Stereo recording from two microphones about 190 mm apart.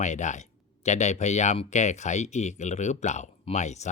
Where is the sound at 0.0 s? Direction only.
40° left (ahead or behind).